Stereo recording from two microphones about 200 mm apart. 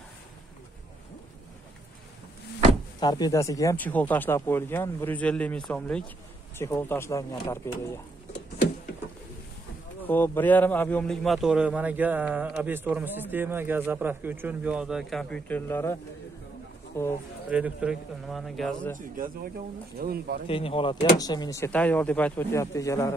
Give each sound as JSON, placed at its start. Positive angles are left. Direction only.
{"t": 3.0, "sound": "speech", "side_deg": 20}
{"t": 10.0, "sound": "a man's voice", "side_deg": 10}
{"t": 17.5, "sound": "a man's voice", "side_deg": -5}
{"t": 18.9, "sound": "a man's voice", "side_deg": -45}
{"t": 20.4, "sound": "speech", "side_deg": 30}